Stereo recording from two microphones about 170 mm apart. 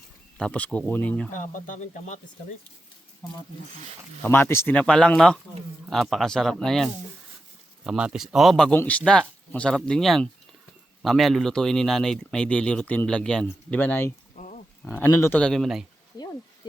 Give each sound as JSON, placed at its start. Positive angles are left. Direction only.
{"t": 0.3, "sound": "speech", "side_deg": 5}
{"t": 1.3, "sound": "speech", "side_deg": 50}
{"t": 4.2, "sound": "speech", "side_deg": 15}
{"t": 14.3, "sound": "pig", "side_deg": 45}
{"t": 14.8, "sound": "speech", "side_deg": 10}
{"t": 15.4, "sound": "speech", "side_deg": 5}